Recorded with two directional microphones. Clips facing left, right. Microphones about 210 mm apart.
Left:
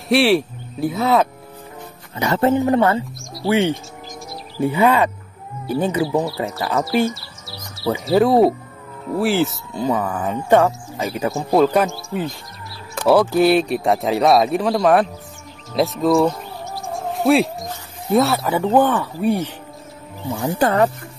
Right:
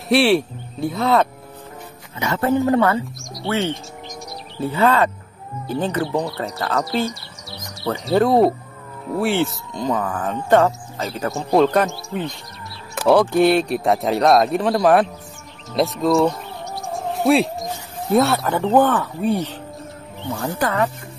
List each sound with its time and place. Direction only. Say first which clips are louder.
0.1 s speech: even; centre (ahead or behind)
2.1 s speech: left 4 dB; 35° left (ahead or behind)
2.5 s speech: left 1 dB; 20° left (ahead or behind); by 7.1 s 5° left (ahead or behind)
7.2 s bird: right 1 dB; 5° left (ahead or behind)
7.9 s speech: left 1 dB; 5° left (ahead or behind)
11.3 s speech: even; 5° left (ahead or behind)
15.7 s music: left 1 dB; centre (ahead or behind)
18.1 s speech: even; centre (ahead or behind)